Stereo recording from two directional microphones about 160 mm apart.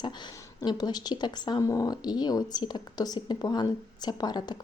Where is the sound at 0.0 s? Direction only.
30° left (ahead or behind).